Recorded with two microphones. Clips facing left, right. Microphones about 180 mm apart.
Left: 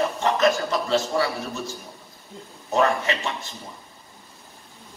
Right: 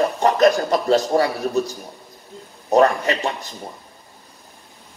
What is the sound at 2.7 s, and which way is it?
Speech, 40° right (ahead or behind).